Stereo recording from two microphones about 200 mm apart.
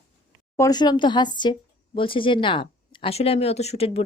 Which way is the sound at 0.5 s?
15° left (ahead or behind).